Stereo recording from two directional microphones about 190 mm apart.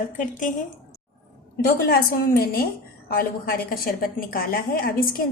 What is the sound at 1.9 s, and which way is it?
A woman's voice, 50° left (ahead or behind).